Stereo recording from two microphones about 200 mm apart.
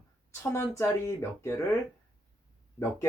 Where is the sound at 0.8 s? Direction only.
15° left (ahead or behind).